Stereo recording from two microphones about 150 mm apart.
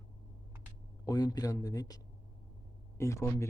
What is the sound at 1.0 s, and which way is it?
Speech, 25° left (ahead or behind).